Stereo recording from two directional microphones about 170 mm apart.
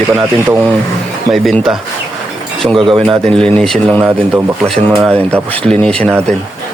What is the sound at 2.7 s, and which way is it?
Speech, 30° right (ahead or behind).